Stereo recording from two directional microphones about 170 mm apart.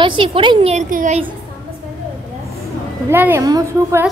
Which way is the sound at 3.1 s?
15° right (ahead or behind).